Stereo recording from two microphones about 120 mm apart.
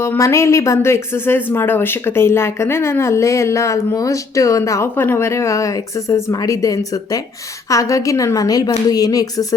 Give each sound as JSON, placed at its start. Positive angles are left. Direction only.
{"t": 0.0, "sound": "speech", "side_deg": 20}